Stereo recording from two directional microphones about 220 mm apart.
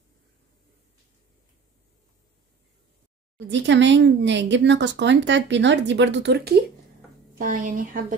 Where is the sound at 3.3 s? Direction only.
55° right (ahead or behind).